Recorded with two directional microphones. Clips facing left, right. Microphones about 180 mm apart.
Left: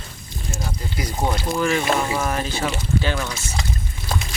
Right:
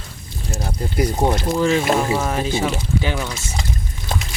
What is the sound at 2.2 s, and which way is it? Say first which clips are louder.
Speech: right 3 dB; 15° right (ahead or behind).